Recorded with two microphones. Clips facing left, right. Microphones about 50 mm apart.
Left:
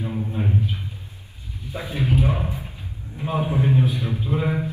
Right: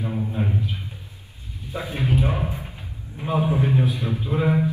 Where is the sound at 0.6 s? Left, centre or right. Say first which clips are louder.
Left 2 dB; left.